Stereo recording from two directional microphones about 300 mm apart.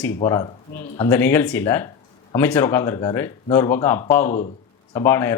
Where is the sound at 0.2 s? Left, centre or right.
Centre.